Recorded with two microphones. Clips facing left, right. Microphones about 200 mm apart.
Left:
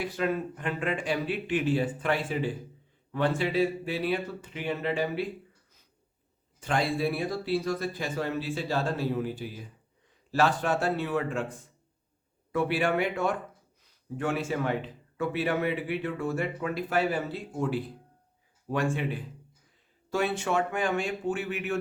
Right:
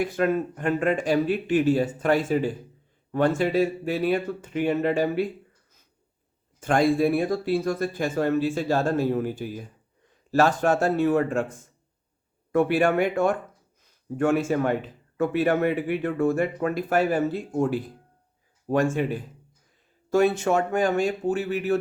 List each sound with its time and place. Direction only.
0.0 s speech: 50° right (ahead or behind)
6.6 s speech: 50° right (ahead or behind)